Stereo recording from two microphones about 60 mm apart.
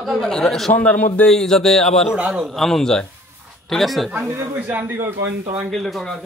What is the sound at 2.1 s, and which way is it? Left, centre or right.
Speech, centre.